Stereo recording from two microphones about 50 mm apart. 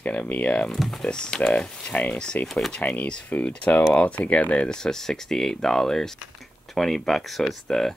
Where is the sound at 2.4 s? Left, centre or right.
Left.